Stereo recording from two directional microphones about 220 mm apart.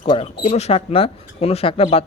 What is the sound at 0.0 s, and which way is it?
Speech, 25° left (ahead or behind).